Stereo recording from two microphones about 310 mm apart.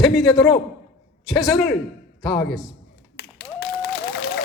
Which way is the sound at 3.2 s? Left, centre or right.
Left.